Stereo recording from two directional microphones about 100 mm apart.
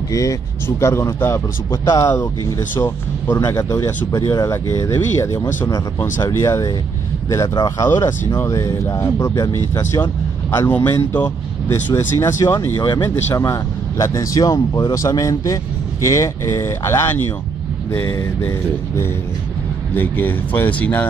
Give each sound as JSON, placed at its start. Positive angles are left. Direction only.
{"t": 0.1, "sound": "a man's voice", "side_deg": 35}
{"t": 3.3, "sound": "a man's voice", "side_deg": 35}
{"t": 10.7, "sound": "speech", "side_deg": 20}
{"t": 11.9, "sound": "a man's voice", "side_deg": 30}
{"t": 20.0, "sound": "speech", "side_deg": 20}